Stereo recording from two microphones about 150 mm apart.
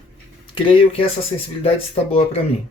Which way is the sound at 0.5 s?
35° left (ahead or behind).